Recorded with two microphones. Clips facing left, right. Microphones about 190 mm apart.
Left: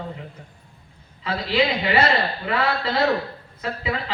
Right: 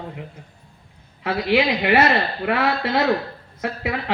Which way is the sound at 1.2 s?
60° right (ahead or behind).